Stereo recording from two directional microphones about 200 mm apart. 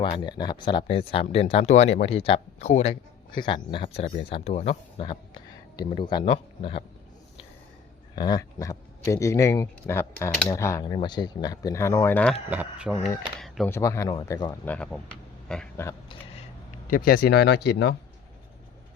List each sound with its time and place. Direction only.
0.0 s speech: 25° left (ahead or behind)
8.1 s speech: 20° left (ahead or behind)
12.5 s speech: 10° right (ahead or behind)
13.7 s speech: 15° left (ahead or behind)
14.6 s speech: 5° left (ahead or behind)
16.9 s speech: 50° left (ahead or behind)